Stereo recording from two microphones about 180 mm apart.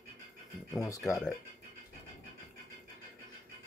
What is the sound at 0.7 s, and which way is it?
Speech, 20° left (ahead or behind).